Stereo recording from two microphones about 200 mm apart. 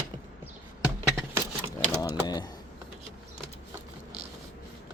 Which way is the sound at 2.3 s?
20° left (ahead or behind).